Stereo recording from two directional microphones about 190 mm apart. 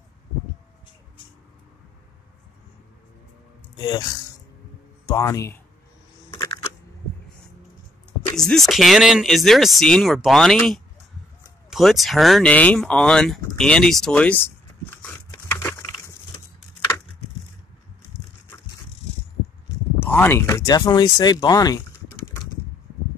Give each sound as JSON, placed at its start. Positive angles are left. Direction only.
{"t": 3.7, "sound": "speech", "side_deg": 20}
{"t": 6.3, "sound": "a sound", "side_deg": 15}
{"t": 8.4, "sound": "speech", "side_deg": 0}
{"t": 15.0, "sound": "typing", "side_deg": 10}
{"t": 20.0, "sound": "speech", "side_deg": 10}